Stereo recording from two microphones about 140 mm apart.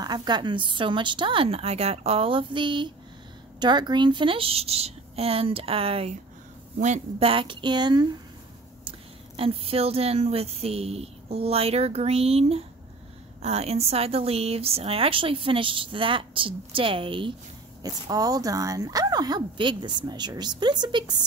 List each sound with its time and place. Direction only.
0.0 s speech: 30° right (ahead or behind)
6.8 s speech: 55° right (ahead or behind)
7.2 s speech: 40° right (ahead or behind)
9.4 s speech: 45° right (ahead or behind)
17.8 s speech: 25° right (ahead or behind)